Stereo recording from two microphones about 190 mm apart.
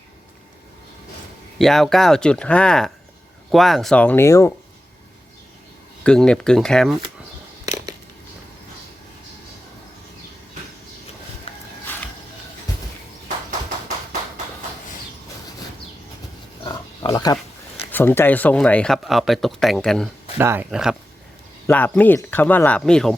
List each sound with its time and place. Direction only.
1.5 s speech: centre (ahead or behind)
6.0 s speech: 5° left (ahead or behind)
7.6 s a sound: 20° right (ahead or behind)
11.5 s music: 30° left (ahead or behind)
16.6 s pig: 20° left (ahead or behind)
17.9 s speech: 10° left (ahead or behind)
20.4 s speech: 15° right (ahead or behind)
21.7 s speech: 10° left (ahead or behind)